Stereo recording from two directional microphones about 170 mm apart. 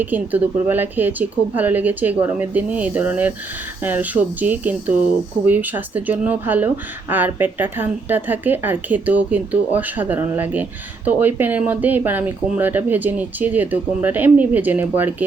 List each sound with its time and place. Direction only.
0.0 s speech: 10° right (ahead or behind)